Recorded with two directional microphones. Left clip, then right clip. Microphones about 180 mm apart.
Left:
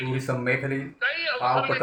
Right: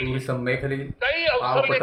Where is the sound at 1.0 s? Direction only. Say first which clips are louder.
Right 4 dB; 40° right (ahead or behind).